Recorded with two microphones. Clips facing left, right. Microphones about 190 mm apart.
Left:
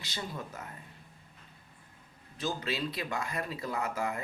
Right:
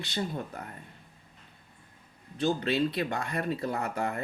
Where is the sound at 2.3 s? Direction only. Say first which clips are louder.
Right 7 dB; 60° right (ahead or behind).